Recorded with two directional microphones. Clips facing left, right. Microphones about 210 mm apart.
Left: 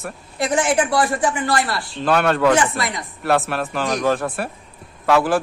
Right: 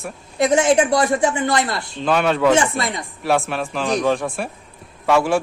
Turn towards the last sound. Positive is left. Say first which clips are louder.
# even
turn(degrees=0)  # may be behind; listen again after turning